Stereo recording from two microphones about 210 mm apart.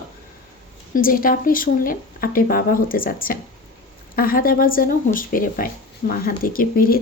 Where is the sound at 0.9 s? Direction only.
40° left (ahead or behind).